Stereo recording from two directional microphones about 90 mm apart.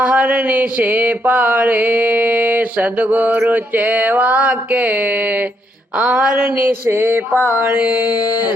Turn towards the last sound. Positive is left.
turn(degrees=-20)  # may be behind; listen again after turning